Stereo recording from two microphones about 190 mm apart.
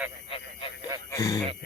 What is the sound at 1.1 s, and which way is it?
Speech, 15° left (ahead or behind).